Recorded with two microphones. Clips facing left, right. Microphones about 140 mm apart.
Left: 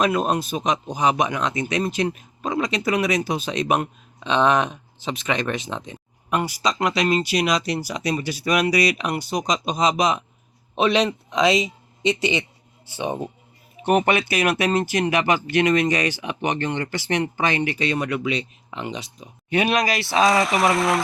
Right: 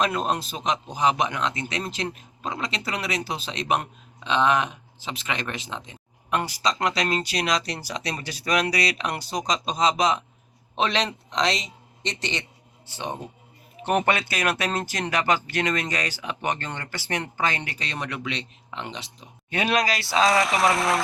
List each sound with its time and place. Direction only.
0.0 s a man's voice: 10° left (ahead or behind)
20.2 s speech: centre (ahead or behind)